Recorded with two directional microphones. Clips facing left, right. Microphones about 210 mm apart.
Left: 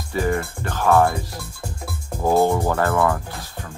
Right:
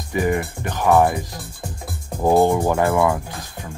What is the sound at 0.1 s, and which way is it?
Speech, 15° right (ahead or behind).